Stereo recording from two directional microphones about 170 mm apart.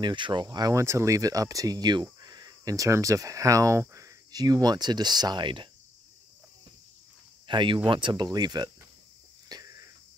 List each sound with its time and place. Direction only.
0.0 s speech: 25° right (ahead or behind)
7.4 s speech: 30° right (ahead or behind)
9.5 s cricket: 20° right (ahead or behind)